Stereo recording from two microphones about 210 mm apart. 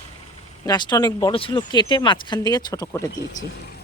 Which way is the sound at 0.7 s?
20° left (ahead or behind).